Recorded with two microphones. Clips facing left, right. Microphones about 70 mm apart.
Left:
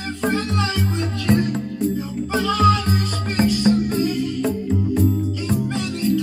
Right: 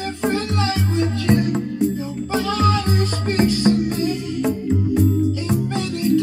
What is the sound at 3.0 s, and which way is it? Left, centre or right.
Music, right.